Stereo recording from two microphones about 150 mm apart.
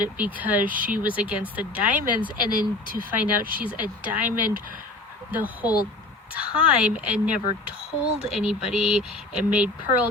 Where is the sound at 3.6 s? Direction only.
10° right (ahead or behind).